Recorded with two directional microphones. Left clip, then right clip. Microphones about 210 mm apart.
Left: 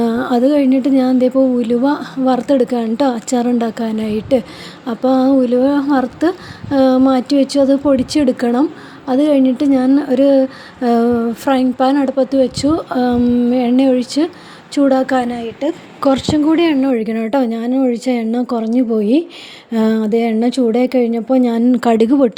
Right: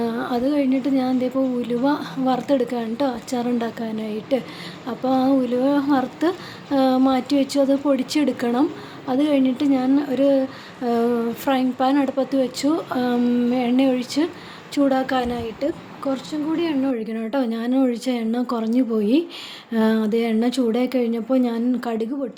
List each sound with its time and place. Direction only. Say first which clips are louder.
0.0 s speech: left 8 dB; 35° left (ahead or behind)
15.3 s a woman's voice: left 5 dB; 15° left (ahead or behind)
16.0 s speech: left 16 dB; 40° left (ahead or behind)